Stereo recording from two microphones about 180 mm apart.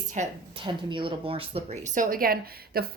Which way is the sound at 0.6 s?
30° right (ahead or behind).